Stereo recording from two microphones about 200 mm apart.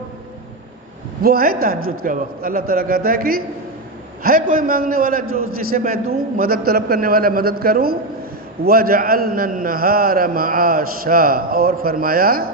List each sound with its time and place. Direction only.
1.2 s a man's voice: 45° right (ahead or behind)